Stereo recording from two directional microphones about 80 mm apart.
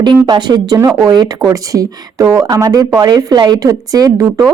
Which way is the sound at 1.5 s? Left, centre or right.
Right.